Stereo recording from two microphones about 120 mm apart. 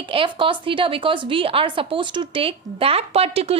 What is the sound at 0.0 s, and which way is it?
A woman's voice, 50° right (ahead or behind).